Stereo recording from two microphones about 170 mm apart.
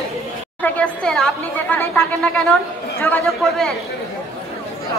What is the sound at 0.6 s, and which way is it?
A woman's voice, 10° left (ahead or behind).